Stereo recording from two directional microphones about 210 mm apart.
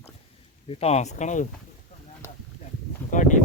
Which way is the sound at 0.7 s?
30° left (ahead or behind).